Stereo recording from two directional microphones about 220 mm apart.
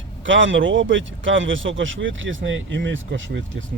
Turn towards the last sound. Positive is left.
turn(degrees=-60)  # may be behind; listen again after turning